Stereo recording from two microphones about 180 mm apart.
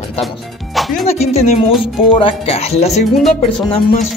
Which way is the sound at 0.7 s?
Centre (ahead or behind).